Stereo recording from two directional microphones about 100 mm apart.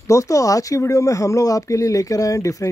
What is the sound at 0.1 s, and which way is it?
Speech, 35° left (ahead or behind).